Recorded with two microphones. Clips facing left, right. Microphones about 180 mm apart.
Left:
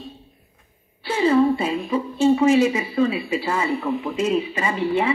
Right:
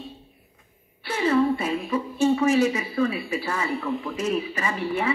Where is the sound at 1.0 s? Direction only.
30° left (ahead or behind).